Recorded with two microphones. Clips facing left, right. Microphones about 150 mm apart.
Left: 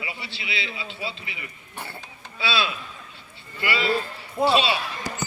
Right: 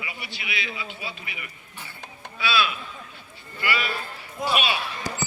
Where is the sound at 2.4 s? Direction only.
30° left (ahead or behind).